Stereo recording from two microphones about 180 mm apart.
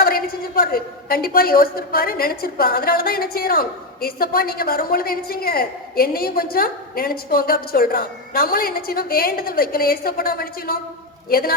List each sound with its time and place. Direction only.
0.0 s a woman's voice: 55° left (ahead or behind)